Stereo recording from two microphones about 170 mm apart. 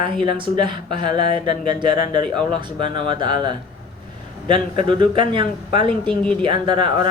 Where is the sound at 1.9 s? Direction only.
50° left (ahead or behind).